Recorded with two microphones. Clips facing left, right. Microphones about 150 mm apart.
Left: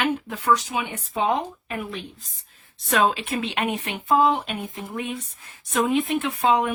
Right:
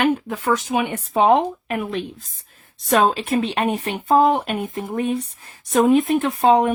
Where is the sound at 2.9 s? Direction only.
40° right (ahead or behind).